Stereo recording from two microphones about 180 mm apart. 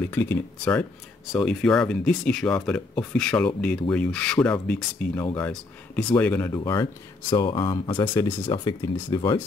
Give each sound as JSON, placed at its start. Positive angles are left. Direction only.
{"t": 0.1, "sound": "speech", "side_deg": 10}
{"t": 7.3, "sound": "speech", "side_deg": 25}
{"t": 8.0, "sound": "speech", "side_deg": 15}